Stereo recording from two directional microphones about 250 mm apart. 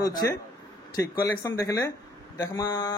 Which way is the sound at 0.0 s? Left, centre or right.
Centre.